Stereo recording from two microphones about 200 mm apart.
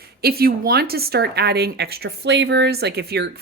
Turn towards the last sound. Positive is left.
turn(degrees=-55)  # may be behind; listen again after turning